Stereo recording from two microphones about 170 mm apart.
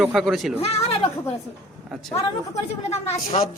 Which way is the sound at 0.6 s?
35° left (ahead or behind).